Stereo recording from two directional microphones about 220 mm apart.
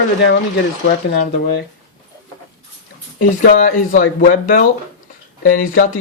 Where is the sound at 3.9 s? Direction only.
35° left (ahead or behind).